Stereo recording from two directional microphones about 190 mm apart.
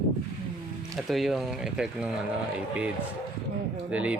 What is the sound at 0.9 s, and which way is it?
Speech, centre (ahead or behind).